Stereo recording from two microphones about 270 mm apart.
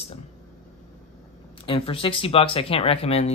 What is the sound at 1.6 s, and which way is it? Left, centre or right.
Speech, centre.